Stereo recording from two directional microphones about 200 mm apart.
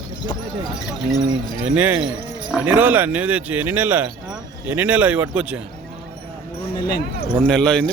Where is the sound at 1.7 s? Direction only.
5° right (ahead or behind).